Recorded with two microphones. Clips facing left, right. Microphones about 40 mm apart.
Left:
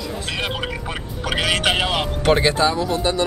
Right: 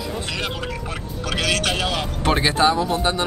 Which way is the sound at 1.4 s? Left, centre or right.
Left.